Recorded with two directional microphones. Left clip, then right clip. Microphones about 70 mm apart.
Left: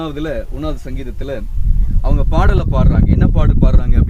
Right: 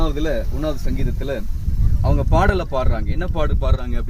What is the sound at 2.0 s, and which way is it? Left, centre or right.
Speech, right.